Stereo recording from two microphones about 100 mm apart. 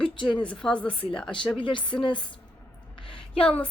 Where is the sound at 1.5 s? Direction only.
55° left (ahead or behind).